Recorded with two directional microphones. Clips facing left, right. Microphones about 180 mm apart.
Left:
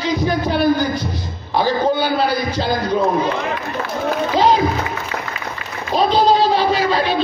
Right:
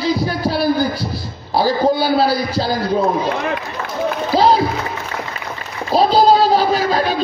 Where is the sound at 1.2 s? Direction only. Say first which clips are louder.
Right 2 dB; 35° right (ahead or behind).